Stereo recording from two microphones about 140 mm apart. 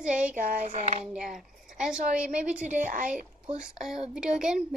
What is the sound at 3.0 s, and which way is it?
A child's voice, 5° right (ahead or behind).